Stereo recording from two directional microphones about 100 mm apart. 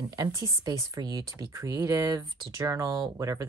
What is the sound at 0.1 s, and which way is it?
Speech, 35° right (ahead or behind).